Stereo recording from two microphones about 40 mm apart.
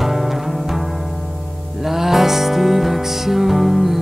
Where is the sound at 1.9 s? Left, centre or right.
Centre.